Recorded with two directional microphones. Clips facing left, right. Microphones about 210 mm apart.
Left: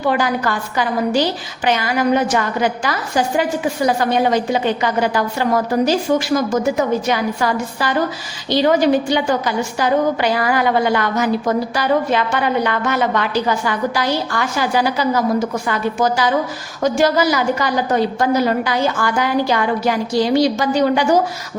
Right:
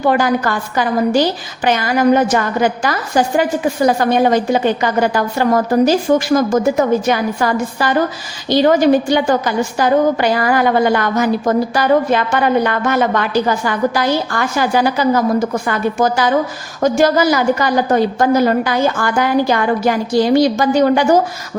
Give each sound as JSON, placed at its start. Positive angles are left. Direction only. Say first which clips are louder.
{"t": 0.1, "sound": "a woman's voice", "louder": "right 3 dB", "side_deg": -45}